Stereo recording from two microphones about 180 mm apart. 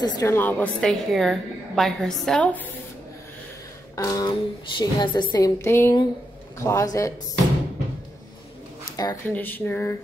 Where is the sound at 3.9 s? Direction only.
20° left (ahead or behind).